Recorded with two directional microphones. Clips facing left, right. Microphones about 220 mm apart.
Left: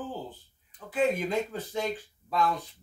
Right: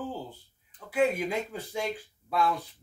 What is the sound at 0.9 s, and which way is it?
Speech, 10° right (ahead or behind).